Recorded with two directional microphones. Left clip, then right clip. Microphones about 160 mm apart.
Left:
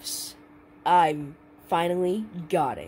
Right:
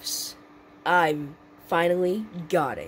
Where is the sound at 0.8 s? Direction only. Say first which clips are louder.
Left 1 dB; 15° right (ahead or behind).